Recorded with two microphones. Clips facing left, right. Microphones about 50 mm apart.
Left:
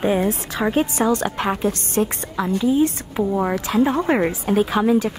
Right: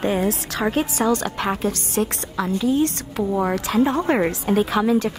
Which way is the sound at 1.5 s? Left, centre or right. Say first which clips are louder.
Left 2 dB; centre.